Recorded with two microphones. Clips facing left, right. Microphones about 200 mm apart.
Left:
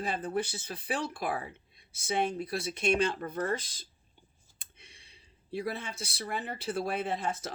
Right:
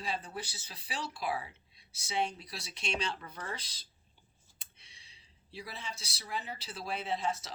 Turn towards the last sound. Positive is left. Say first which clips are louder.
# left 2 dB
turn(degrees=55)  # may be behind; listen again after turning